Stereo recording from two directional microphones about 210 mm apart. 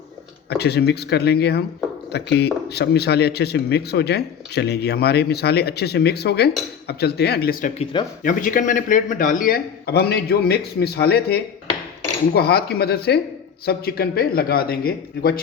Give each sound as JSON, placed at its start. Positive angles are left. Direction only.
{"t": 0.5, "sound": "speech", "side_deg": 50}